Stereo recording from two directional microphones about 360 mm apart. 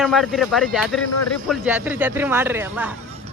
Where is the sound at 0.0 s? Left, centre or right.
Centre.